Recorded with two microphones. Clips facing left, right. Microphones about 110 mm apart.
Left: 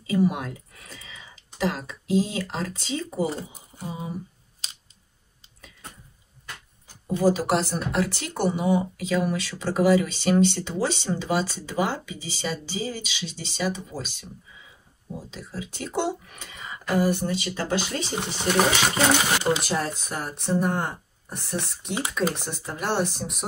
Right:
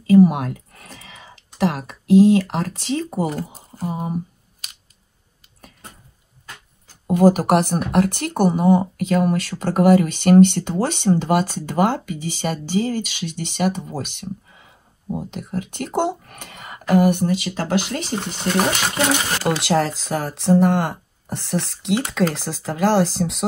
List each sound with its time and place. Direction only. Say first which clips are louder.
0.0 s speech: right 10 dB; 50° right (ahead or behind)
3.3 s speech: right 4 dB; 25° left (ahead or behind)
3.9 s speech: right 7 dB; 55° right (ahead or behind)
7.1 s speech: right 7 dB; 55° right (ahead or behind)
18.5 s speech: right 2 dB; 15° left (ahead or behind)
19.6 s speech: right 8 dB; 90° right